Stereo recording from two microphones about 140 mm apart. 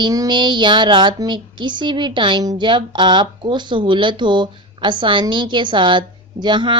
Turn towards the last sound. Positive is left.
turn(degrees=-35)  # may be behind; listen again after turning